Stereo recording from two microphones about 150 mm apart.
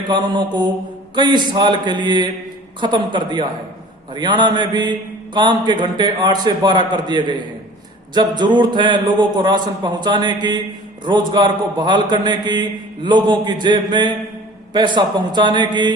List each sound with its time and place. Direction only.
0.1 s a man's voice: 30° right (ahead or behind)